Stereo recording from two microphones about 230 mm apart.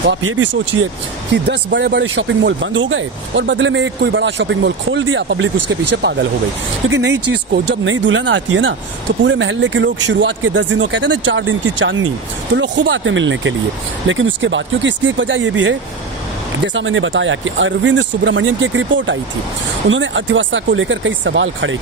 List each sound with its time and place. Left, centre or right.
0.1 s speech: right
1.3 s speech: right
5.5 s speech: right
6.8 s speech: right
16.7 s speech: right